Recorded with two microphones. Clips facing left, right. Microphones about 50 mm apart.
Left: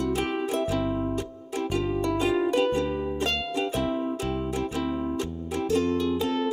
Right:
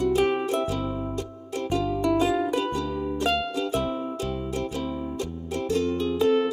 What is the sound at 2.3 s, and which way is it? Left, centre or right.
Music, left.